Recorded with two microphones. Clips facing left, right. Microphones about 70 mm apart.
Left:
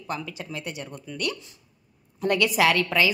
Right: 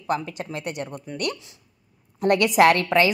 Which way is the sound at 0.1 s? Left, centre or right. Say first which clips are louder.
Right 6 dB; right.